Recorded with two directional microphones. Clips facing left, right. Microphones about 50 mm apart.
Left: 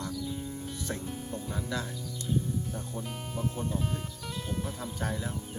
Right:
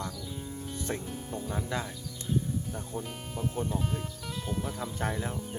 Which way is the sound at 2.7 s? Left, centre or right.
Centre.